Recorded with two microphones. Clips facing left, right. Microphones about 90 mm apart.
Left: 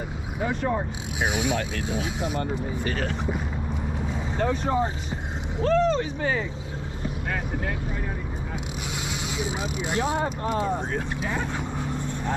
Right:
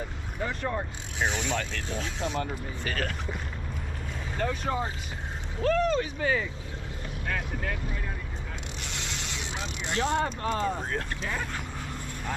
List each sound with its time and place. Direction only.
0.4 s speech: 10° left (ahead or behind)
4.4 s speech: 15° left (ahead or behind)
8.9 s speech: 5° left (ahead or behind)
10.9 s speech: 20° left (ahead or behind)